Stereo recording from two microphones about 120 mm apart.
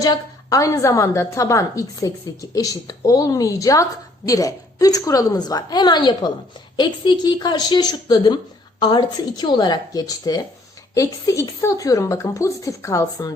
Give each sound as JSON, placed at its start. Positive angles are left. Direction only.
{"t": 0.0, "sound": "a woman's voice", "side_deg": 30}